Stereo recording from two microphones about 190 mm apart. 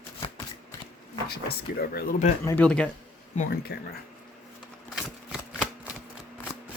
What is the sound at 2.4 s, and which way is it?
Speech, 10° left (ahead or behind).